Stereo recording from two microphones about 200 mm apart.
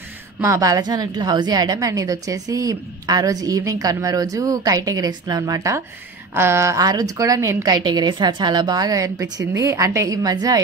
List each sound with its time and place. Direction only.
0.4 s a woman's voice: 15° right (ahead or behind)